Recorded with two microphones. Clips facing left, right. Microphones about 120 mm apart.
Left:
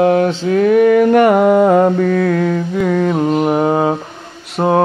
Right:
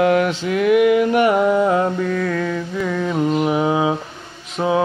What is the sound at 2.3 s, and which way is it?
Mantra, 40° left (ahead or behind).